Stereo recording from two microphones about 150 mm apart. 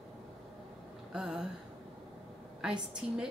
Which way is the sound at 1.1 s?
5° right (ahead or behind).